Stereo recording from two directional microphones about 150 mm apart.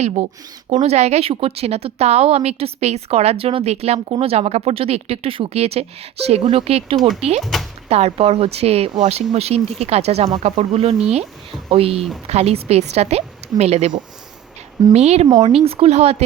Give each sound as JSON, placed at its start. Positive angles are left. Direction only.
{"t": 0.0, "sound": "speech", "side_deg": -45}
{"t": 14.9, "sound": "speech", "side_deg": -45}